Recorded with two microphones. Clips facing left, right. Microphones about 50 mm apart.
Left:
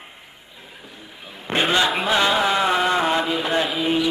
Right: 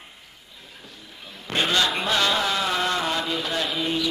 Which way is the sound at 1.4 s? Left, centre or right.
Left.